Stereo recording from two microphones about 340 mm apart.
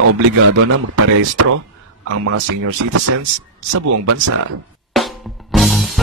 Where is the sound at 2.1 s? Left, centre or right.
Right.